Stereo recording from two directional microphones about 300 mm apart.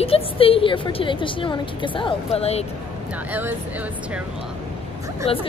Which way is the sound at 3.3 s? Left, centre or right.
Centre.